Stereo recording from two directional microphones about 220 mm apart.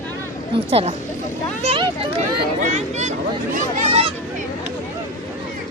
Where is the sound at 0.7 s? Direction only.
25° right (ahead or behind).